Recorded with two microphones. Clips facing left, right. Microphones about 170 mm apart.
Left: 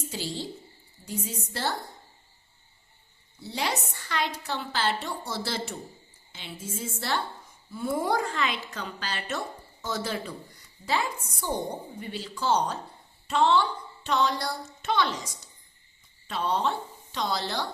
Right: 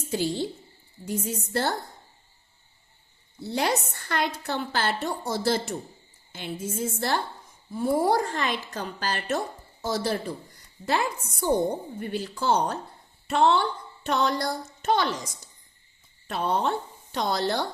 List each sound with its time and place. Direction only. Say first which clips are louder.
0.1 s a woman's voice: right 11 dB; 55° right (ahead or behind)
3.4 s a woman's voice: right 5 dB; 50° right (ahead or behind)
10.8 s a woman's voice: right 2 dB; 50° right (ahead or behind)